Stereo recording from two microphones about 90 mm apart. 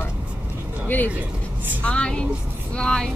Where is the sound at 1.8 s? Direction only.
10° left (ahead or behind).